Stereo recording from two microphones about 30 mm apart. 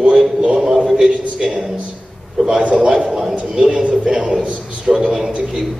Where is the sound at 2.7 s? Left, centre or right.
Right.